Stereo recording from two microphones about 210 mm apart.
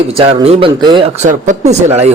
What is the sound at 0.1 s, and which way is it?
Speech, 25° right (ahead or behind).